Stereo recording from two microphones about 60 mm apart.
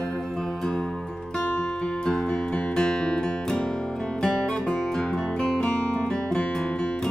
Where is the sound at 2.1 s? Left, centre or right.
Centre.